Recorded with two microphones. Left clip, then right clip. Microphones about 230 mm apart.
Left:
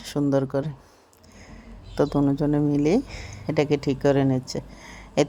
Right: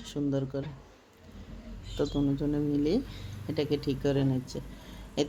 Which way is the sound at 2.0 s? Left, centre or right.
Left.